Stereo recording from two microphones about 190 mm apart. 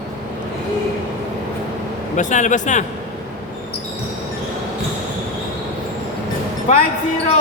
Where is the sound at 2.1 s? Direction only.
40° left (ahead or behind).